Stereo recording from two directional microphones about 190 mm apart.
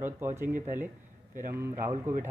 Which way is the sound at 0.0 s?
15° right (ahead or behind).